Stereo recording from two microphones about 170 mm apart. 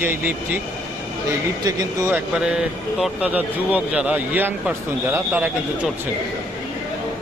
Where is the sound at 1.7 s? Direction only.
20° right (ahead or behind).